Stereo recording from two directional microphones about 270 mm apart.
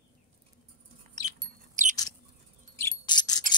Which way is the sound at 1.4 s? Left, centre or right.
Right.